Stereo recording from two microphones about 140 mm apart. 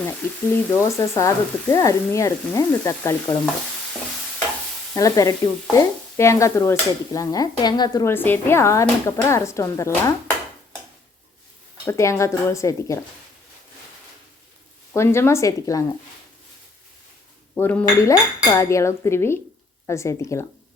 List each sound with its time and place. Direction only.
0.5 s speech: 20° left (ahead or behind)
4.9 s speech: 25° left (ahead or behind)
8.0 s speech: 15° left (ahead or behind)
11.9 s speech: 20° left (ahead or behind)
14.9 s speech: 20° left (ahead or behind)
17.5 s speech: 10° left (ahead or behind)
18.1 s speech: 25° left (ahead or behind)